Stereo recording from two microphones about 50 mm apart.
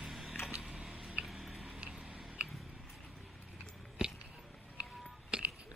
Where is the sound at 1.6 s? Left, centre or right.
Centre.